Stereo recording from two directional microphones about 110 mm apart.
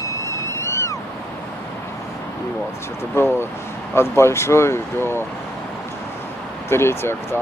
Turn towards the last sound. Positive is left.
turn(degrees=25)  # may be behind; listen again after turning